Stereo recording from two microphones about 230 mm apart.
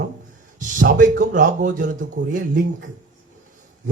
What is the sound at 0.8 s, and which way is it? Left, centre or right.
A man's voice, right.